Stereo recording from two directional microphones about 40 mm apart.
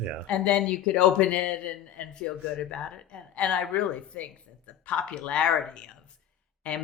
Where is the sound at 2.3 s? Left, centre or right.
Centre.